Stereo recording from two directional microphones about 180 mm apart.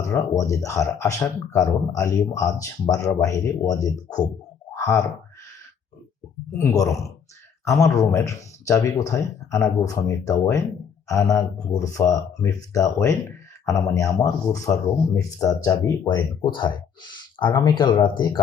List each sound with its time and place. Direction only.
0.0 s speech: 15° left (ahead or behind)
4.7 s a sound: 15° left (ahead or behind)
6.6 s speech: 15° left (ahead or behind)